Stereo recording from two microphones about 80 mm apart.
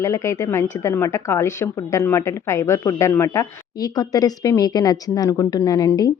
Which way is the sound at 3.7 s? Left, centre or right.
Left.